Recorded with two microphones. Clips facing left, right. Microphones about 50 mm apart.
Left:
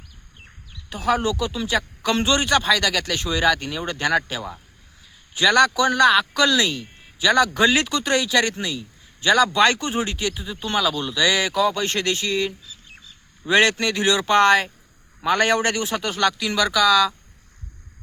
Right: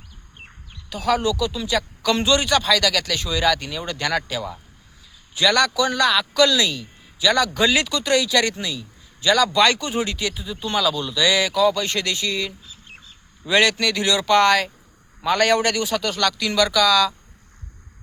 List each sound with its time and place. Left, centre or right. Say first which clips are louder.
0.9 s speech: right 1 dB; left